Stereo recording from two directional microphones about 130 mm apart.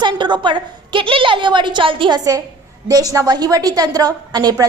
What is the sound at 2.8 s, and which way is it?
A woman's voice, 25° right (ahead or behind).